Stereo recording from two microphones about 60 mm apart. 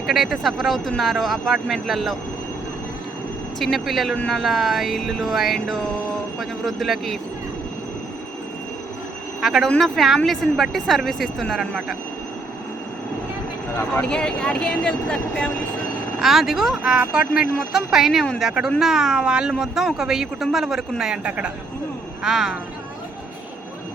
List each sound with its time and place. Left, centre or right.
0.1 s speech: centre
3.6 s speech: centre
9.4 s speech: centre
13.9 s speech: centre
16.2 s a man's voice: centre